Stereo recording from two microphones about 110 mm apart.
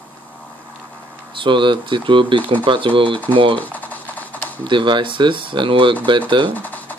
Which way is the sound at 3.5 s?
15° left (ahead or behind).